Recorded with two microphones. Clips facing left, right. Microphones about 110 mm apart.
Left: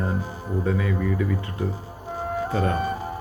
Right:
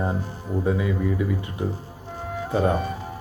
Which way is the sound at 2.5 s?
15° right (ahead or behind).